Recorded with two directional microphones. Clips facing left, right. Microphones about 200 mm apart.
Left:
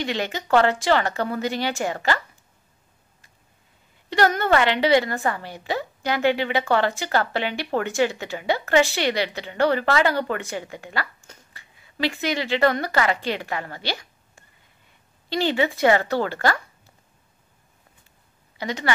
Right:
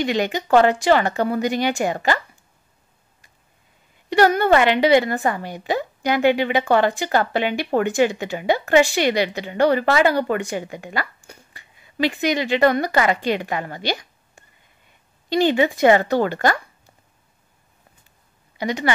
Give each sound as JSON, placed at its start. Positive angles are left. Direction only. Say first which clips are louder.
{"t": 0.0, "sound": "a woman's voice", "louder": "right 5 dB", "side_deg": -15}
{"t": 4.1, "sound": "a woman's voice", "louder": "right 4 dB", "side_deg": -15}
{"t": 18.6, "sound": "a woman's voice", "louder": "right 5 dB", "side_deg": -15}